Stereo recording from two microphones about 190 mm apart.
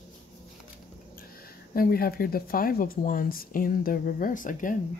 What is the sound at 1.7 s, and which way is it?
Speech, 50° left (ahead or behind).